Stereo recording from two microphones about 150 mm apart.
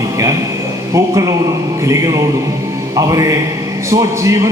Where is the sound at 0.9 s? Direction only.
20° right (ahead or behind).